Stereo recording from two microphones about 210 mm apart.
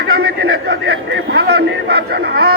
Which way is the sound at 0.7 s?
50° right (ahead or behind).